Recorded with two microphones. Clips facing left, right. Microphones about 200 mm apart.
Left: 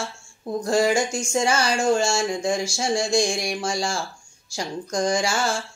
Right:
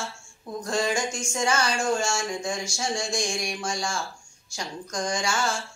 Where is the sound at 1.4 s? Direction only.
30° left (ahead or behind).